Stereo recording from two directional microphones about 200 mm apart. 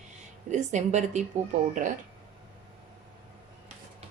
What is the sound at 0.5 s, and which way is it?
Speech, 35° right (ahead or behind).